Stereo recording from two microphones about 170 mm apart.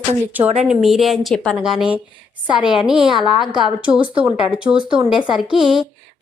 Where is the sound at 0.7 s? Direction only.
Centre (ahead or behind).